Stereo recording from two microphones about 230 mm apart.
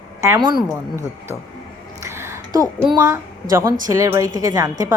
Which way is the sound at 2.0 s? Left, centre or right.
Centre.